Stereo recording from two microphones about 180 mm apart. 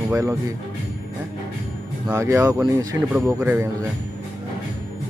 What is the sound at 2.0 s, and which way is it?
Speech, 15° right (ahead or behind).